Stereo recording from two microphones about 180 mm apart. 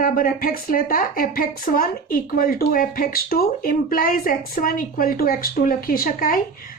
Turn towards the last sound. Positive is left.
turn(degrees=50)  # may be behind; listen again after turning